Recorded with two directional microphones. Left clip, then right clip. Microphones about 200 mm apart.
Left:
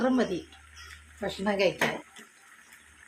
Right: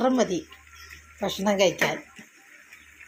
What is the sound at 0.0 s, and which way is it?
Speech, 15° right (ahead or behind).